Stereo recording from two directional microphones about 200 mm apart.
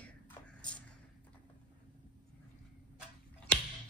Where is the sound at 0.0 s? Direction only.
5° left (ahead or behind).